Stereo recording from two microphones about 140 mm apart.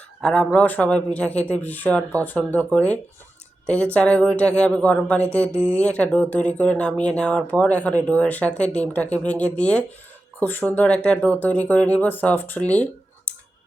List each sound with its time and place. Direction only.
0.2 s speech: 5° left (ahead or behind)
5.5 s speech: 20° right (ahead or behind)
5.8 s speech: 10° left (ahead or behind)